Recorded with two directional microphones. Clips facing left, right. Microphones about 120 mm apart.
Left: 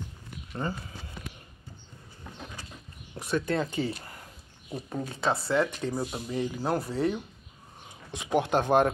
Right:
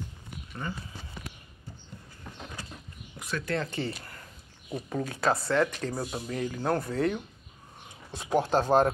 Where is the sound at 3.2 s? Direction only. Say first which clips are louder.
Left 4 dB; 25° left (ahead or behind); by 7.2 s 5° left (ahead or behind).